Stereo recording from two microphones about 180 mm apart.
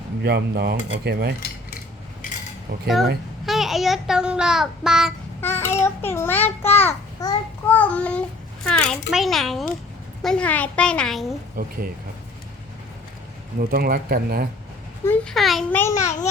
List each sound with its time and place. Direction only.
0.2 s speech: 65° right (ahead or behind)
2.8 s a child's voice: centre (ahead or behind)
5.4 s a child's voice: 15° left (ahead or behind)
11.6 s speech: 50° right (ahead or behind)
13.6 s speech: 55° right (ahead or behind)
15.0 s a child's voice: 5° left (ahead or behind)
15.7 s a child's voice: 15° left (ahead or behind)